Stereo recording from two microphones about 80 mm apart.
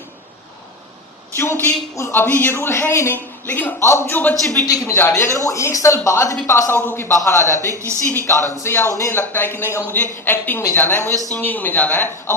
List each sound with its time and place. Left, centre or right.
2.0 s a man's voice: left
4.2 s a man's voice: left
7.7 s speech: right
8.0 s a man's voice: left